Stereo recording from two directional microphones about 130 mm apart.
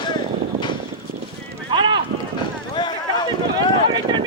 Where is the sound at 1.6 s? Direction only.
40° right (ahead or behind).